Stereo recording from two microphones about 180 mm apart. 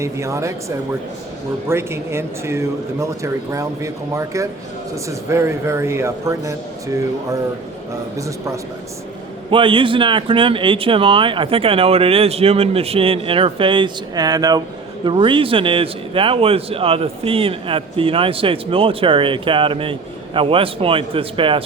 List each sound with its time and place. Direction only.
0.0 s speech: 15° right (ahead or behind)
1.6 s speech: 15° right (ahead or behind)
9.5 s a man's voice: 30° right (ahead or behind)